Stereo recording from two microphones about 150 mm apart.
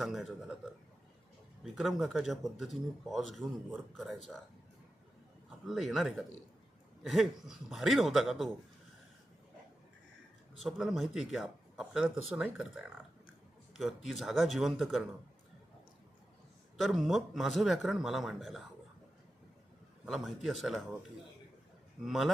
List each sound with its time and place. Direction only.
0.0 s speech: centre (ahead or behind)
1.6 s speech: centre (ahead or behind)
5.6 s speech: centre (ahead or behind)
10.6 s speech: centre (ahead or behind)
16.7 s speech: centre (ahead or behind)
20.1 s speech: centre (ahead or behind)
22.0 s speech: centre (ahead or behind)